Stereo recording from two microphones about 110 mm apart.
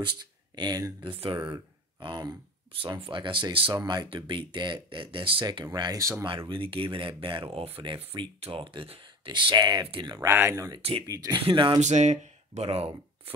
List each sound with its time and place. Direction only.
0.6 s speech: 35° right (ahead or behind)
1.0 s speech: 50° right (ahead or behind)
2.7 s speech: 55° right (ahead or behind); by 6.2 s 25° right (ahead or behind)
6.2 s speech: 50° right (ahead or behind)
10.3 s speech: 25° right (ahead or behind)
11.4 s speech: 50° right (ahead or behind)
11.8 s speech: 90° right; by 12.9 s 70° right (ahead or behind)